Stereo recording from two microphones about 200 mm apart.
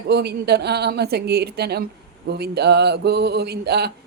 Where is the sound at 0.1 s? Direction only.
55° right (ahead or behind).